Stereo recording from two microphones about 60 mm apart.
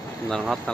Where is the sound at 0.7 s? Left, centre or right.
Centre.